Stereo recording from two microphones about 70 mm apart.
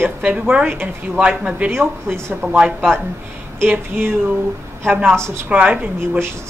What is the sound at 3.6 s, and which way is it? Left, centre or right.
Speech, right.